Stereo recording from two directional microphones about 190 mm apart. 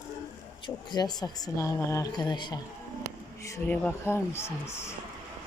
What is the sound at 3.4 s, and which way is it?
Speech, 10° left (ahead or behind).